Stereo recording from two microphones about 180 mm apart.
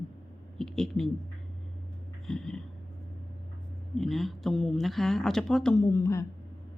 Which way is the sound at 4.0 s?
Centre (ahead or behind).